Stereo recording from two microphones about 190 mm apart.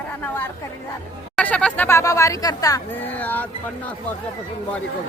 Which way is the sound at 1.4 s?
5° left (ahead or behind).